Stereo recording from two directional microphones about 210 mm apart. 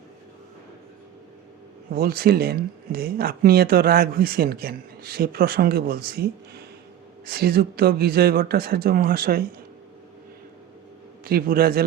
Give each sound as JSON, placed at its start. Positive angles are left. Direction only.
{"t": 1.9, "sound": "speech", "side_deg": -45}
{"t": 7.3, "sound": "speech", "side_deg": -50}
{"t": 11.2, "sound": "a man's voice", "side_deg": -45}